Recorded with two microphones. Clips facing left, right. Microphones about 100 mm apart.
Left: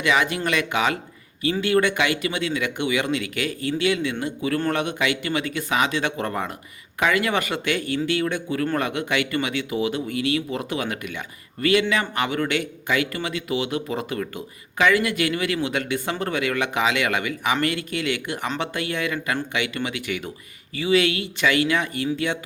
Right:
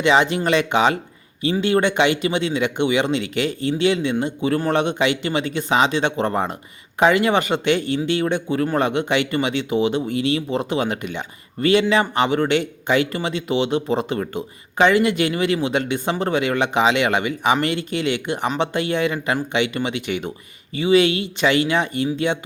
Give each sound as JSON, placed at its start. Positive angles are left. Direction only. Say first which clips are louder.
{"t": 0.0, "sound": "speech", "louder": "right 5 dB", "side_deg": -25}